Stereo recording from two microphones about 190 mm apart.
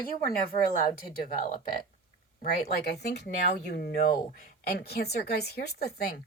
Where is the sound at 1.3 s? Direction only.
40° left (ahead or behind).